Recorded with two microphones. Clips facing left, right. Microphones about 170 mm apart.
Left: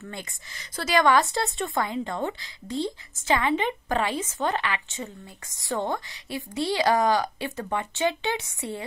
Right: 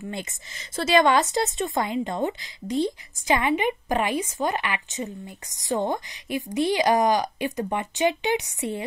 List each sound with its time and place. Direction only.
0.0 s speech: 20° right (ahead or behind)